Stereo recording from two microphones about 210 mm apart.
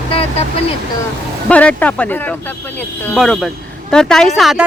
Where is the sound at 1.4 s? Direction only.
5° left (ahead or behind).